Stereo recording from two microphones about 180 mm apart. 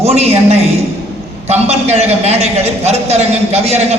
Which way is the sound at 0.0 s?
35° right (ahead or behind).